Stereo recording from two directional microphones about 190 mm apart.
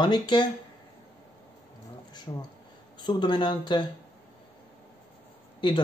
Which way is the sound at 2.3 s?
20° left (ahead or behind).